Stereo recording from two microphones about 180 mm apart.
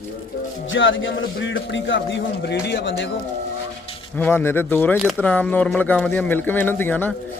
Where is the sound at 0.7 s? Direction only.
90° left.